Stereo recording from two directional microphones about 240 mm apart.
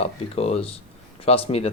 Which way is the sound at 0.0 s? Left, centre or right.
Left.